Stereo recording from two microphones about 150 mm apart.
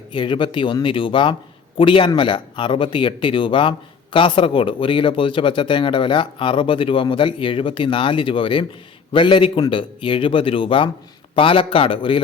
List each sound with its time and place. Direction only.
0.1 s speech: 30° left (ahead or behind)